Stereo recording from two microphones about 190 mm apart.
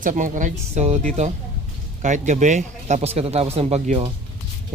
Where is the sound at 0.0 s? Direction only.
40° right (ahead or behind).